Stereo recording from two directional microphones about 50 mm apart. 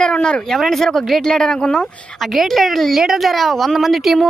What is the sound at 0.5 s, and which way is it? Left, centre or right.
Speech, centre.